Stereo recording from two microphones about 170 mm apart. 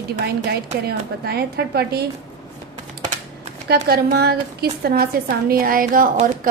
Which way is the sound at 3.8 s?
70° right (ahead or behind).